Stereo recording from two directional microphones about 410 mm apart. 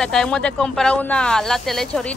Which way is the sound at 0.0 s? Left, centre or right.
Centre.